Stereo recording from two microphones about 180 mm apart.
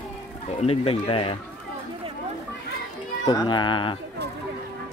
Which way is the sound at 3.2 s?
25° left (ahead or behind).